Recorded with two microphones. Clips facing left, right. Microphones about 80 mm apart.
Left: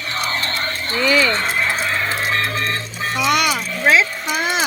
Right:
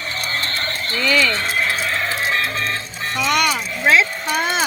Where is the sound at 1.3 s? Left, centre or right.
Left.